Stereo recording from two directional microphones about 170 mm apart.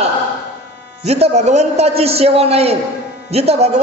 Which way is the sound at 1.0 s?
40° right (ahead or behind).